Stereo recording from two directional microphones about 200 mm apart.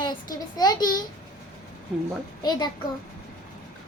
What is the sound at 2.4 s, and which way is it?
Speech, 20° left (ahead or behind).